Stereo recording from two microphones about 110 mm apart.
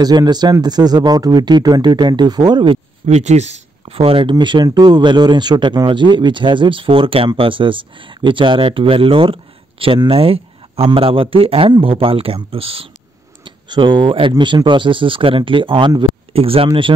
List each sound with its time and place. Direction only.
0.0 s speech: 40° right (ahead or behind)
3.1 s speech: 90° right; by 12.9 s 55° right (ahead or behind)
13.4 s speech: 45° right (ahead or behind)